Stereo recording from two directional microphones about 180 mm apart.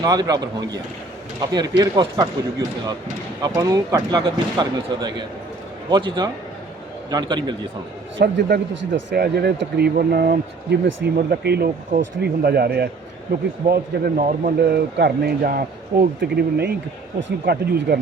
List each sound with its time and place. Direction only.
0.0 s speech: 20° right (ahead or behind)
8.2 s speech: 70° right (ahead or behind)
17.2 s speech: 75° right (ahead or behind)